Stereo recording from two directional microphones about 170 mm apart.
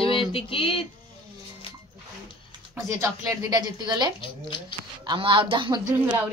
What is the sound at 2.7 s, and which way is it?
A woman's voice, 20° right (ahead or behind).